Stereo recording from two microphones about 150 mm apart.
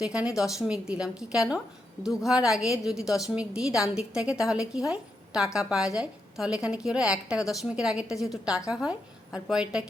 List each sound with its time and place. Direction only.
0.0 s a woman's voice: 5° right (ahead or behind)